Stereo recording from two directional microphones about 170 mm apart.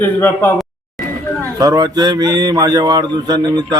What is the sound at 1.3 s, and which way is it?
Speech, 20° right (ahead or behind).